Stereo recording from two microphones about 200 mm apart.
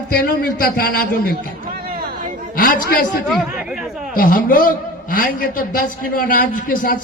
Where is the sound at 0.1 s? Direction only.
50° left (ahead or behind).